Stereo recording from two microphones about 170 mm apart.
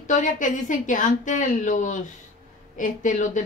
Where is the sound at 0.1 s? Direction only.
50° left (ahead or behind).